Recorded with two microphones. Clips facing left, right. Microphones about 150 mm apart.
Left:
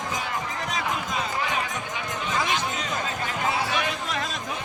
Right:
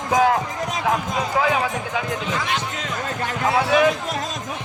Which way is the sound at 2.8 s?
70° right (ahead or behind).